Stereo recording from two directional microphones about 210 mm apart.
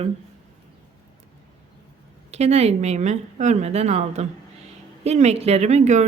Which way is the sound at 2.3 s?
30° right (ahead or behind).